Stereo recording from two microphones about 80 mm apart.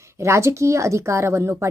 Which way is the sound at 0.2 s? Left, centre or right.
Right.